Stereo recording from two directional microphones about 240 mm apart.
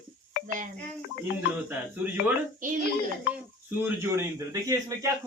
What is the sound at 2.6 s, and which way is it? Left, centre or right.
Speech, right.